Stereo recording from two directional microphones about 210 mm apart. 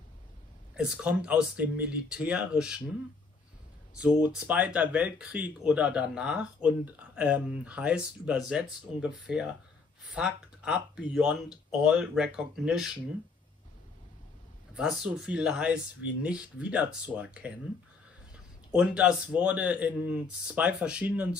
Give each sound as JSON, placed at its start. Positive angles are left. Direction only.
{"t": 0.7, "sound": "speech", "side_deg": -5}
{"t": 4.0, "sound": "speech", "side_deg": -5}
{"t": 14.7, "sound": "speech", "side_deg": -5}
{"t": 18.7, "sound": "speech", "side_deg": -5}